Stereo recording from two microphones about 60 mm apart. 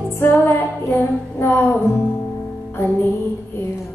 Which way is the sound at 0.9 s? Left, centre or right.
Left.